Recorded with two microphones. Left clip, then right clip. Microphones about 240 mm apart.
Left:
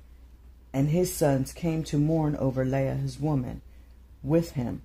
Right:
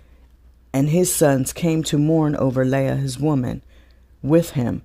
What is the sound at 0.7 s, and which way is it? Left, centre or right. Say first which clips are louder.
Speech: right 8 dB; right.